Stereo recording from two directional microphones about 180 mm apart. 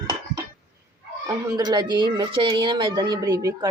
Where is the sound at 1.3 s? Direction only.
20° right (ahead or behind).